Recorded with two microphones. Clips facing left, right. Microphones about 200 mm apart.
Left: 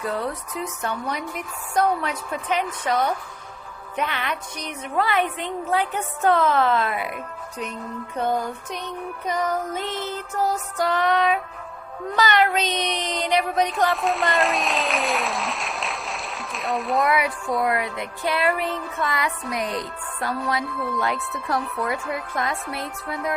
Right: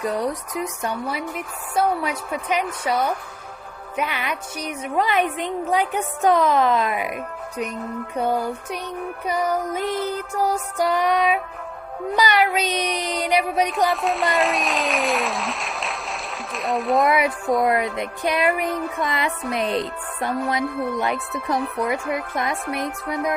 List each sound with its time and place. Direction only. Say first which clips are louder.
0.0 s a woman's voice: right 3 dB; 15° right (ahead or behind)
8.1 s a woman's voice: right 1 dB; 10° right (ahead or behind)
13.9 s speech: right 1 dB; centre (ahead or behind)
17.1 s a woman's voice: right 3 dB; 20° right (ahead or behind)